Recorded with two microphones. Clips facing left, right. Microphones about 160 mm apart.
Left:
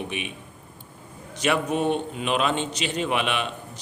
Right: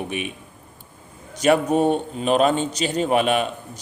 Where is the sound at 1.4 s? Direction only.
40° right (ahead or behind).